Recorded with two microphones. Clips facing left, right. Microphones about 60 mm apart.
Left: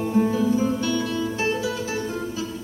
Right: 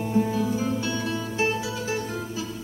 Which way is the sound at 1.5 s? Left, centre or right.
Left.